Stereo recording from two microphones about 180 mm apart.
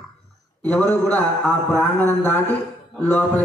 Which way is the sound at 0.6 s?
10° left (ahead or behind).